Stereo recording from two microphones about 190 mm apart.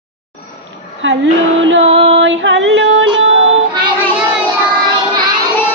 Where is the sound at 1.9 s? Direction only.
35° right (ahead or behind).